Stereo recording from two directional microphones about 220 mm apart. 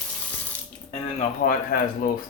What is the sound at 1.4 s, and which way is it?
Speech, 40° left (ahead or behind).